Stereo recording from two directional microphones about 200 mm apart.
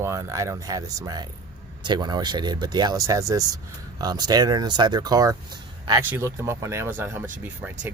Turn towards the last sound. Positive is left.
turn(degrees=-5)  # may be behind; listen again after turning